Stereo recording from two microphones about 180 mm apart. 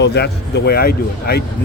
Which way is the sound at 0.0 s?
65° left (ahead or behind).